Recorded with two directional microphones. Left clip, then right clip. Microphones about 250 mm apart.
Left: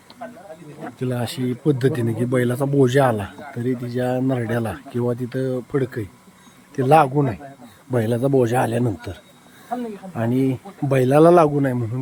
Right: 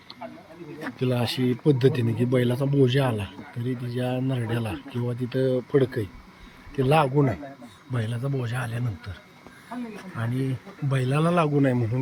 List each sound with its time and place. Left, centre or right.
1.0 s a man's voice: centre
10.2 s speech: centre